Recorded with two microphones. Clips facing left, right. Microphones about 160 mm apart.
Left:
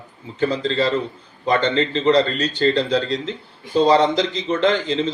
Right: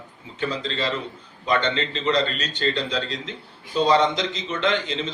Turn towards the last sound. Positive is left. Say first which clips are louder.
# left 5 dB
turn(degrees=35)  # may be behind; listen again after turning